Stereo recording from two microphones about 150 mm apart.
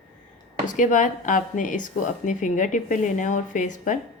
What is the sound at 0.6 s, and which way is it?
Speech, 60° left (ahead or behind).